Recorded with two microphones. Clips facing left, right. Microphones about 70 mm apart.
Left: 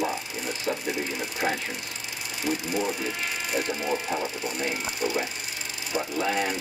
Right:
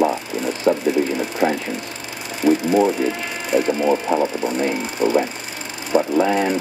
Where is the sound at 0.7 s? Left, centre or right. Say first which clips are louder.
Right 13 dB; right.